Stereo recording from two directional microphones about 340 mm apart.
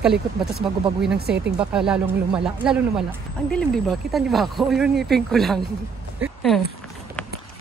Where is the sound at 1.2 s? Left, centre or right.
Right.